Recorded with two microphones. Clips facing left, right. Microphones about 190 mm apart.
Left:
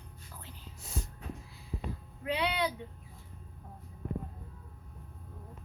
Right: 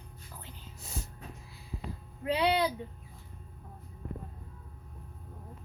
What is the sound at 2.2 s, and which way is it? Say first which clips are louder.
Music: right 4 dB; 35° right (ahead or behind).